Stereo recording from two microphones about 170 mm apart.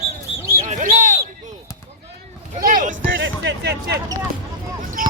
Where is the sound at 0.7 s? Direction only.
50° right (ahead or behind).